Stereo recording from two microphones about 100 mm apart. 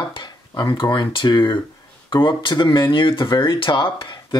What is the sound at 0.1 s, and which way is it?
Speech, 50° left (ahead or behind).